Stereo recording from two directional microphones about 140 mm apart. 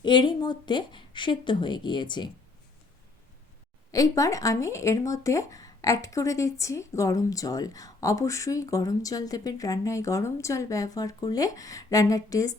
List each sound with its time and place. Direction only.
0.0 s speech: 35° left (ahead or behind)
3.9 s speech: 25° left (ahead or behind)